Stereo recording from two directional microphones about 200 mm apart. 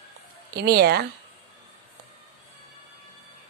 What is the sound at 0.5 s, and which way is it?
Speech, 55° right (ahead or behind).